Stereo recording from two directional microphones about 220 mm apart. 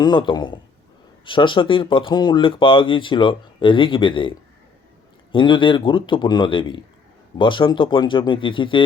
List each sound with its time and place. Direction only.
0.0 s speech: 20° left (ahead or behind)